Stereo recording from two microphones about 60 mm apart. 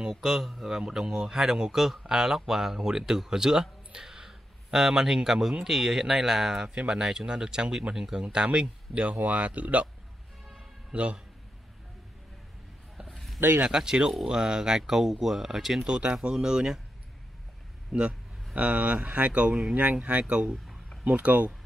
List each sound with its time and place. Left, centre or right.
0.1 s speech: centre; by 9.8 s right
10.9 s speech: centre
12.9 s a sound: centre
13.6 s speech: centre
15.9 s speech: centre
17.9 s speech: centre